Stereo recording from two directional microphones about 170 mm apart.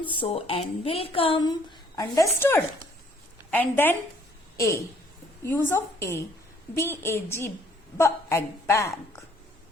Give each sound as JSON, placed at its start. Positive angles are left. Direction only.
{"t": 0.1, "sound": "speech", "side_deg": 35}
{"t": 2.0, "sound": "a woman's voice", "side_deg": 20}